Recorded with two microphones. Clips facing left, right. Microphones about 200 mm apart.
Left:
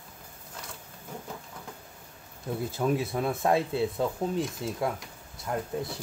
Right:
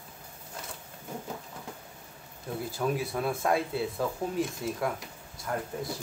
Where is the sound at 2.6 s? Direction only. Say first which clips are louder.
Left 3 dB; 20° left (ahead or behind).